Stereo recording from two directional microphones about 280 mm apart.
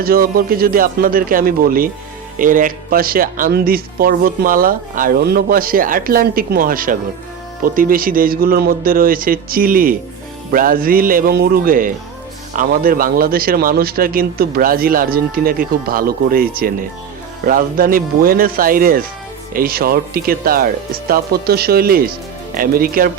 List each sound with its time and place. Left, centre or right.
0.0 s speech: right